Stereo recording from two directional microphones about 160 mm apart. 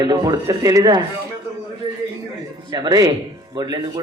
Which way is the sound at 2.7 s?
25° right (ahead or behind).